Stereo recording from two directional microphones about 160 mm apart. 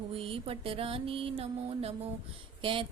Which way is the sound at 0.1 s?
35° right (ahead or behind).